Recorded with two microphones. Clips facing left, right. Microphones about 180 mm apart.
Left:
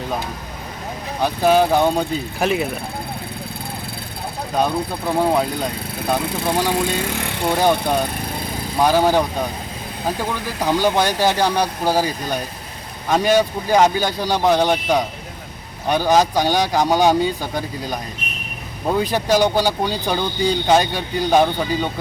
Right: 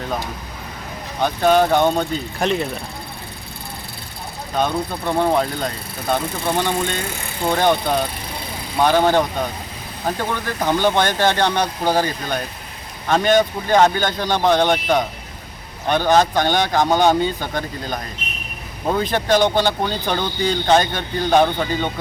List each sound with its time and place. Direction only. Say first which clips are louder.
1.2 s speech: even; 5° left (ahead or behind)
4.6 s speech: even; 5° left (ahead or behind)
7.1 s speech: left 6 dB; 75° left (ahead or behind)
7.5 s speech: even; 5° left (ahead or behind)
8.8 s speech: even; 5° left (ahead or behind)
19.1 s speech: right 1 dB; 10° left (ahead or behind)